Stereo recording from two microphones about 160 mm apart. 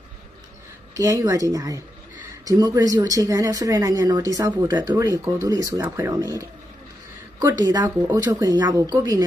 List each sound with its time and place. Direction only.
1.2 s speech: 20° right (ahead or behind)